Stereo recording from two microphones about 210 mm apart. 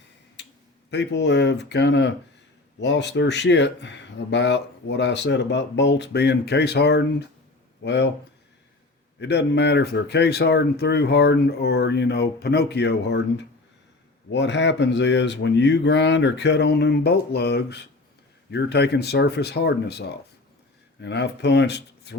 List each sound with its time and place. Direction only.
0.9 s speech: 55° left (ahead or behind)
9.2 s speech: 55° left (ahead or behind)